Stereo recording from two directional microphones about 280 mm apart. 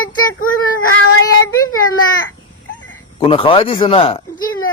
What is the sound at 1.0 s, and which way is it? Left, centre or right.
Child singing, left.